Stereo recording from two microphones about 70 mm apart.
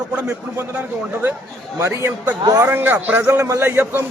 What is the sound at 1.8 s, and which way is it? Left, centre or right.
Speech, right.